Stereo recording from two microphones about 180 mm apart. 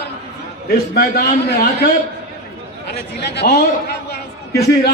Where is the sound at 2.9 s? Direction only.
65° left (ahead or behind).